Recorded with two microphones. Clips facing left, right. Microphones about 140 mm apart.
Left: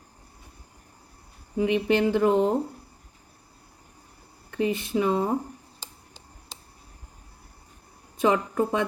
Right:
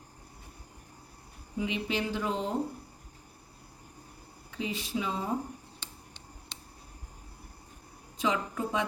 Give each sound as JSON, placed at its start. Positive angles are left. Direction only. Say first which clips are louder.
{"t": 1.5, "sound": "speech", "louder": "left 10 dB", "side_deg": 60}
{"t": 4.5, "sound": "speech", "louder": "left 9 dB", "side_deg": 60}
{"t": 8.2, "sound": "a woman's voice", "louder": "left 8 dB", "side_deg": 55}